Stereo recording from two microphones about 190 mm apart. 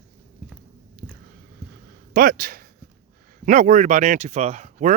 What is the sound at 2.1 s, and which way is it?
Speech, 50° right (ahead or behind).